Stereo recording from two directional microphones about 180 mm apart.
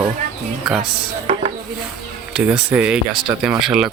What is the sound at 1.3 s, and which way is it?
Chopping, 30° right (ahead or behind).